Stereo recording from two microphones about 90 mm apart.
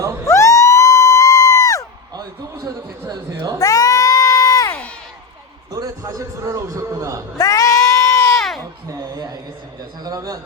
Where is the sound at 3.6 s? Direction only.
40° left (ahead or behind).